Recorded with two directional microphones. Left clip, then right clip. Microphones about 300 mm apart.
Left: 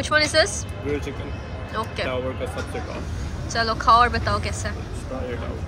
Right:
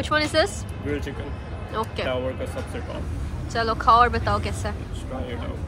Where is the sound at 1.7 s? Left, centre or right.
Centre.